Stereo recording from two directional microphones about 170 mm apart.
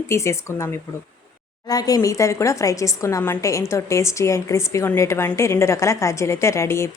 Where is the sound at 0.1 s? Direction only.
15° left (ahead or behind).